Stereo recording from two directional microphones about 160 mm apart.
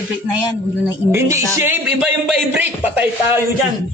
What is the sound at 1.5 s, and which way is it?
Speech, 10° right (ahead or behind).